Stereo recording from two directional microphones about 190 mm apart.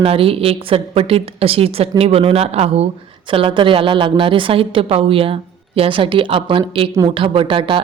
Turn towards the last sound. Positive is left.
turn(degrees=-25)  # may be behind; listen again after turning